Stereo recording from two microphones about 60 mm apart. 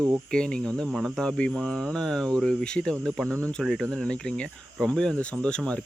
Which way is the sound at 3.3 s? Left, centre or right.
Right.